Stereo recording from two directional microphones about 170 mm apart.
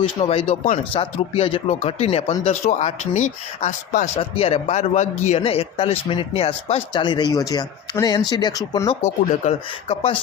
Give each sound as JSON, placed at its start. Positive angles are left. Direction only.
{"t": 0.0, "sound": "speech", "side_deg": 35}
{"t": 9.4, "sound": "speech", "side_deg": 35}